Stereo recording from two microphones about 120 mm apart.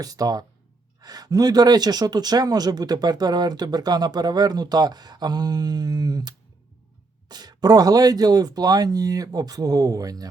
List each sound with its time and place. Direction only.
0.0 s speech: 30° right (ahead or behind)